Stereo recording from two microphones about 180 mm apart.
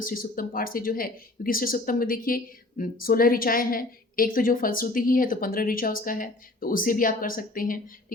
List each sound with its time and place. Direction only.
0.0 s speech: 50° left (ahead or behind)